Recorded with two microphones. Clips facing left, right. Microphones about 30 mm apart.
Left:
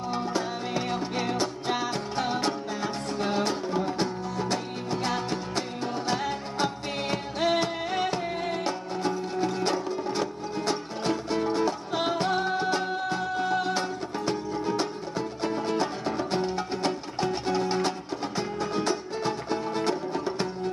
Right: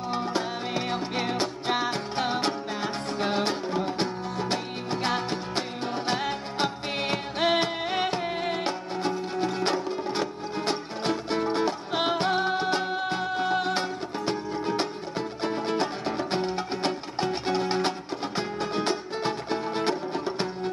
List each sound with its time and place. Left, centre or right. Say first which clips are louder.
0.1 s music: right 1 dB; centre